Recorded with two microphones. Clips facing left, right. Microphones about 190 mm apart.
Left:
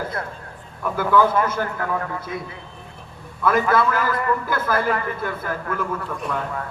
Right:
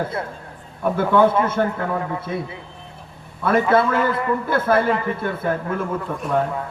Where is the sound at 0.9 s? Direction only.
25° right (ahead or behind).